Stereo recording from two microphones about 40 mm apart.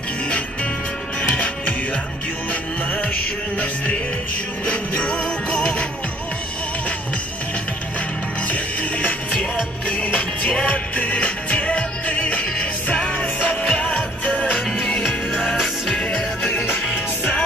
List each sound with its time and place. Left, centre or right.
1.3 s music: left
8.5 s music: left
13.5 s music: left
15.0 s music: centre
16.7 s music: left